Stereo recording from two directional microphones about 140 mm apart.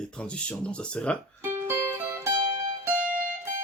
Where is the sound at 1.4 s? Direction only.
20° right (ahead or behind).